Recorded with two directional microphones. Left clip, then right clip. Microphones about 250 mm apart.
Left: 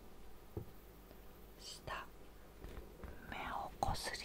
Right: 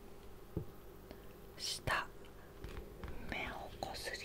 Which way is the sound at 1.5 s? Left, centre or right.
Right.